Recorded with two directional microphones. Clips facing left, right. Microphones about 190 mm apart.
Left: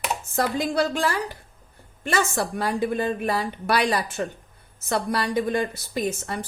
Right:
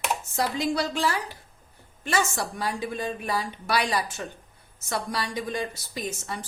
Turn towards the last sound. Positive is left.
turn(degrees=55)  # may be behind; listen again after turning